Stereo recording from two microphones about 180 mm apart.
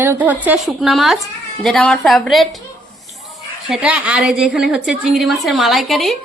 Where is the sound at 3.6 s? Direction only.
5° right (ahead or behind).